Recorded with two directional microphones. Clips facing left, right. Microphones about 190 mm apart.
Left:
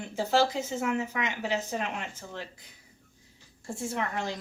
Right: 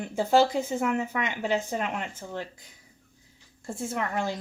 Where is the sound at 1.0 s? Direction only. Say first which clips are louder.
Right 2 dB; 55° right (ahead or behind).